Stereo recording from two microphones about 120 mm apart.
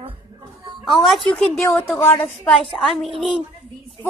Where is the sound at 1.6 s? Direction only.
20° left (ahead or behind).